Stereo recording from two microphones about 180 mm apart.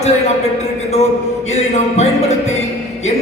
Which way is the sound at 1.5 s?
40° left (ahead or behind).